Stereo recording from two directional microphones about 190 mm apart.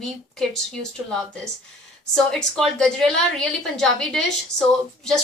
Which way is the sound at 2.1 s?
5° left (ahead or behind).